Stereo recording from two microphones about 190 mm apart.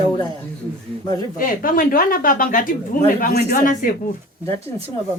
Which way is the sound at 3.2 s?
55° left (ahead or behind).